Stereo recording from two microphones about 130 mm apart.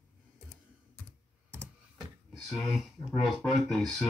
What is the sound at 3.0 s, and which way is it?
Speech, centre (ahead or behind).